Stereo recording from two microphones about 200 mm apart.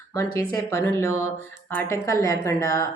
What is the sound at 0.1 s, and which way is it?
Speech, 15° left (ahead or behind).